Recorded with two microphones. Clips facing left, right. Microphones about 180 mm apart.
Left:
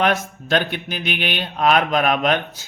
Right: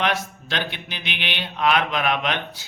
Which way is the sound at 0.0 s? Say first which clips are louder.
Left 5 dB; 45° left (ahead or behind).